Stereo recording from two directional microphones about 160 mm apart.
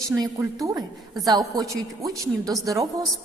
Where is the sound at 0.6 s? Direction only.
25° right (ahead or behind).